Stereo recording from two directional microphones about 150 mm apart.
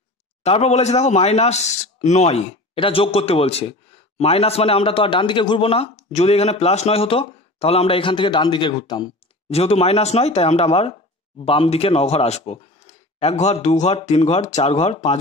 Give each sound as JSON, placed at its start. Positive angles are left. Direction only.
{"t": 0.4, "sound": "a man's voice", "side_deg": 45}
{"t": 9.5, "sound": "speech", "side_deg": 45}